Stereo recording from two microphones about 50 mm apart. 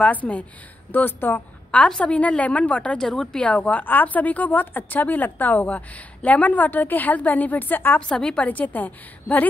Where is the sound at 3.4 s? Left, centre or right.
Left.